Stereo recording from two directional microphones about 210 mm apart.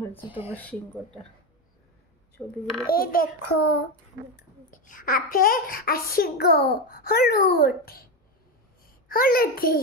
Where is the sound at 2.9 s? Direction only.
45° left (ahead or behind).